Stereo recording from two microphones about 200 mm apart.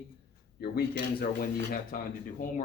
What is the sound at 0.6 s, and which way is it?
Speech, 50° left (ahead or behind).